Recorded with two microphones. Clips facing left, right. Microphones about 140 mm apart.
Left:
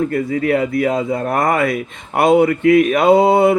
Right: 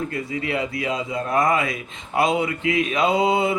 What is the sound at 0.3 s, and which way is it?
A man's voice, 55° left (ahead or behind).